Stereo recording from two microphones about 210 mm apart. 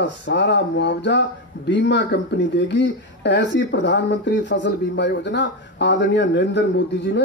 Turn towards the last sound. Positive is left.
turn(degrees=55)  # may be behind; listen again after turning